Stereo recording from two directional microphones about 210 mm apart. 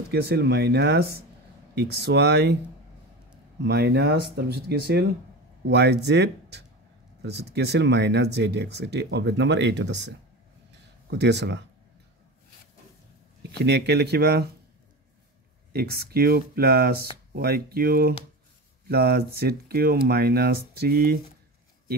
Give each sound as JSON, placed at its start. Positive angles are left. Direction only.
{"t": 0.1, "sound": "speech", "side_deg": -50}
{"t": 3.6, "sound": "speech", "side_deg": -50}
{"t": 13.4, "sound": "speech", "side_deg": -55}
{"t": 15.7, "sound": "speech", "side_deg": -50}